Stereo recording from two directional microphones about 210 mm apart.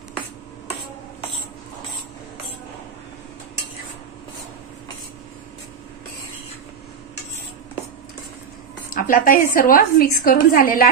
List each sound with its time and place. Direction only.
8.9 s a woman's voice: 40° left (ahead or behind)